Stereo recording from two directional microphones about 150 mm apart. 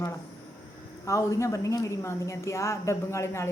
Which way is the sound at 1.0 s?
20° left (ahead or behind).